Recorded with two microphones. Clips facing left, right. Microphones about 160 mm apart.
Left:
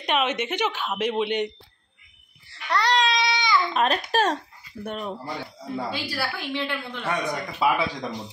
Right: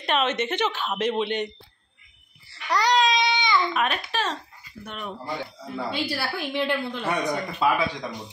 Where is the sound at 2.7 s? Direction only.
5° right (ahead or behind).